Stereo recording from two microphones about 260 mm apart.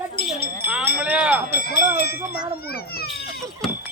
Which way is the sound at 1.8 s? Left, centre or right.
Left.